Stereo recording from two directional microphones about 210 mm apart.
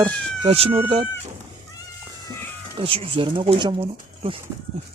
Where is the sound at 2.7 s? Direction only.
25° right (ahead or behind).